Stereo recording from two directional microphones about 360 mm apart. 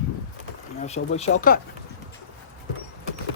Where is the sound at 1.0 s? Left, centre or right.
Centre.